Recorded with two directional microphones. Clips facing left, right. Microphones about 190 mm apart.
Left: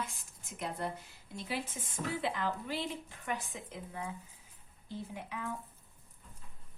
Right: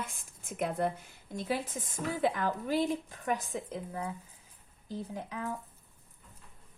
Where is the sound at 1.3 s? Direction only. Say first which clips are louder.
Right 5 dB; 45° right (ahead or behind).